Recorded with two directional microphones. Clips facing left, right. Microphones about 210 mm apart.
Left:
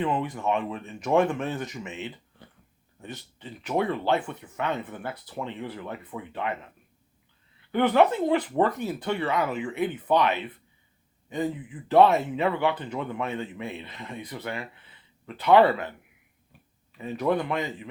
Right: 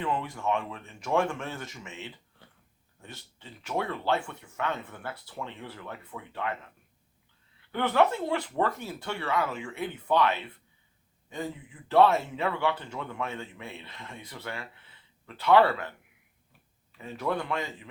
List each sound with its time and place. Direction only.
0.0 s speech: 20° left (ahead or behind)
7.7 s speech: 20° left (ahead or behind)
17.0 s speech: 20° left (ahead or behind)